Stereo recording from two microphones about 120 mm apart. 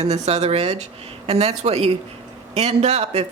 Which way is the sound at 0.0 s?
65° right (ahead or behind).